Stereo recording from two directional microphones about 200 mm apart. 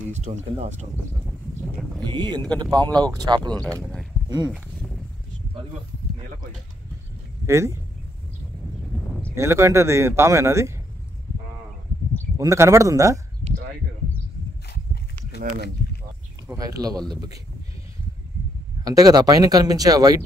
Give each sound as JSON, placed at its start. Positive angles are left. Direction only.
{"t": 0.1, "sound": "speech", "side_deg": -35}
{"t": 2.0, "sound": "speech", "side_deg": -20}
{"t": 3.8, "sound": "a sound", "side_deg": 0}
{"t": 7.4, "sound": "speech", "side_deg": -15}
{"t": 8.9, "sound": "a sound", "side_deg": 0}
{"t": 9.3, "sound": "speech", "side_deg": -15}
{"t": 12.4, "sound": "speech", "side_deg": -15}
{"t": 16.5, "sound": "speech", "side_deg": -20}
{"t": 18.9, "sound": "speech", "side_deg": -20}